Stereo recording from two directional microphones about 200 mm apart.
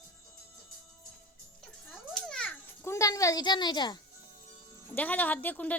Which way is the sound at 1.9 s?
Centre (ahead or behind).